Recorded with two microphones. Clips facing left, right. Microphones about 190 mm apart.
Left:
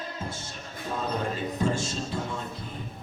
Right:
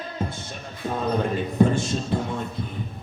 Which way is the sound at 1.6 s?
55° right (ahead or behind).